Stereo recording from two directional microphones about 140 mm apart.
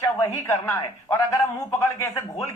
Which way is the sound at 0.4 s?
15° left (ahead or behind).